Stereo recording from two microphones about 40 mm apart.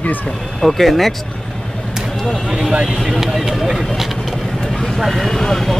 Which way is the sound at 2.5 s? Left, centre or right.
Centre.